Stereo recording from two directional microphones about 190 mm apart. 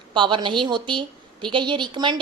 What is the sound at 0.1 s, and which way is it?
A woman's voice, 25° right (ahead or behind).